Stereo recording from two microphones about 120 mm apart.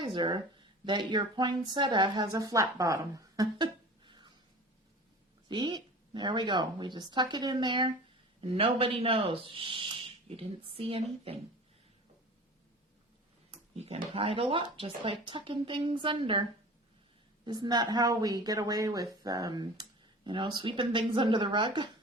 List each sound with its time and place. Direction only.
0.0 s speech: 40° right (ahead or behind)
4.0 s a sound: 40° right (ahead or behind)
5.5 s speech: 40° right (ahead or behind)
8.4 s speech: 50° right (ahead or behind)
13.5 s speech: 55° right (ahead or behind)
17.4 s speech: 35° right (ahead or behind)